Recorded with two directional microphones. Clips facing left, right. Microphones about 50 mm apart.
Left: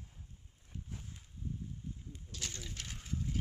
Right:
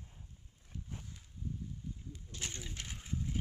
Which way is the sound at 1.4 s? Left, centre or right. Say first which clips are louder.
Even; left.